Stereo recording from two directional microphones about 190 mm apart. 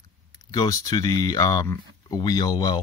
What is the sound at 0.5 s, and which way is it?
Speech, 20° left (ahead or behind).